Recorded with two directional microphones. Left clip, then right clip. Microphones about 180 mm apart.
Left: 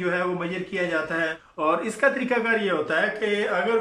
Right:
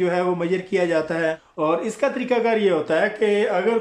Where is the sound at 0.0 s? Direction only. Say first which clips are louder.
Right 4 dB; 30° right (ahead or behind).